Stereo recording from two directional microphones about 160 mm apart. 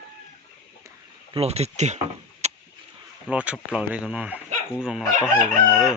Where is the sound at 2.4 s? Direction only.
45° right (ahead or behind).